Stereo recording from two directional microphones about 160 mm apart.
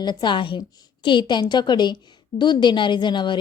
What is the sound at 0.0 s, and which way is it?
A woman's voice, 30° left (ahead or behind).